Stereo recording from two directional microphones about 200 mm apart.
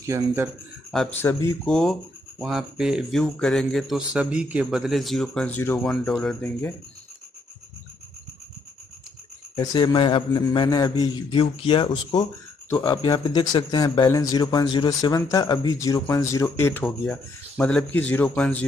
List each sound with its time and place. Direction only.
0.0 s speech: 15° right (ahead or behind)
0.9 s speech: 10° left (ahead or behind)
9.6 s speech: 25° left (ahead or behind); by 18.7 s 5° left (ahead or behind)